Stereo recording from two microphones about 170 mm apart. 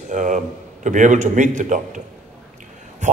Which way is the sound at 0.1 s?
50° right (ahead or behind).